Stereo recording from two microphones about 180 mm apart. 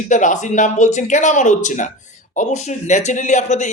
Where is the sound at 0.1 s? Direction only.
45° left (ahead or behind).